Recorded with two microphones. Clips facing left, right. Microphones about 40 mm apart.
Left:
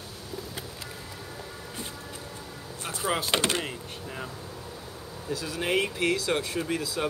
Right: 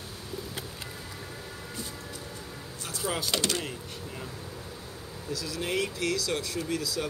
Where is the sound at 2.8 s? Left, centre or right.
Left.